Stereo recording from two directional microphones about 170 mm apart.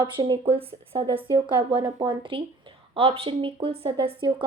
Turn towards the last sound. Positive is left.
turn(degrees=-30)  # may be behind; listen again after turning